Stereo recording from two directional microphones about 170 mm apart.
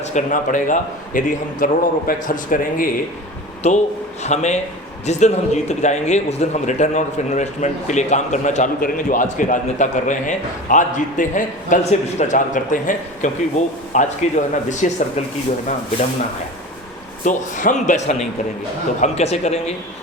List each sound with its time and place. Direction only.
0.1 s a man's voice: 50° left (ahead or behind)
3.6 s a man's voice: 45° left (ahead or behind)
17.2 s a man's voice: 50° left (ahead or behind)